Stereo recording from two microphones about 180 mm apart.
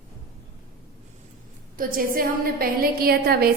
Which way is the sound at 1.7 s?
50° right (ahead or behind).